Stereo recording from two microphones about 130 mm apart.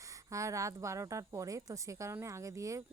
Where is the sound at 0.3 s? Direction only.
25° right (ahead or behind).